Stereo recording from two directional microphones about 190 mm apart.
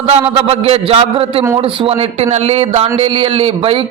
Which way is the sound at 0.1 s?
30° right (ahead or behind).